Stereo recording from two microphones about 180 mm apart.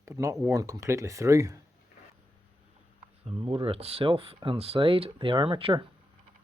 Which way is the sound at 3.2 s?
30° right (ahead or behind).